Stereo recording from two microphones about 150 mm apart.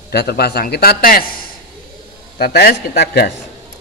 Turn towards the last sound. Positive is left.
turn(degrees=90)